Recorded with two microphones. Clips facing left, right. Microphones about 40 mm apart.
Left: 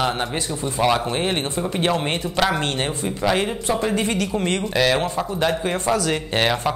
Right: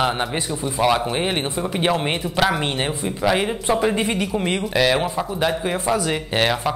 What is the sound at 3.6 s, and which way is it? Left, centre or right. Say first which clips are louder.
Speech: right 2 dB; centre.